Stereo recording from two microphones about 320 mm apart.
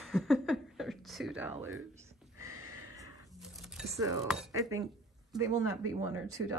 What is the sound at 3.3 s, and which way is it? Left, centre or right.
Music, centre.